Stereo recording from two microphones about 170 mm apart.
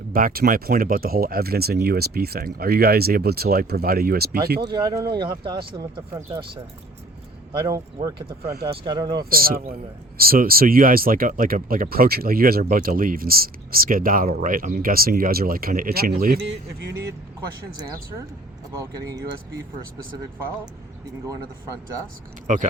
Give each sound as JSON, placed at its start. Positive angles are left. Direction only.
{"t": 0.1, "sound": "speech", "side_deg": -55}
{"t": 4.7, "sound": "speech", "side_deg": -25}
{"t": 8.7, "sound": "speech", "side_deg": -30}
{"t": 9.1, "sound": "speech", "side_deg": -60}